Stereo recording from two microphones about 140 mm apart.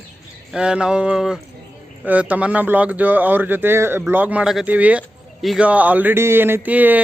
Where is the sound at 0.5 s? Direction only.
5° right (ahead or behind).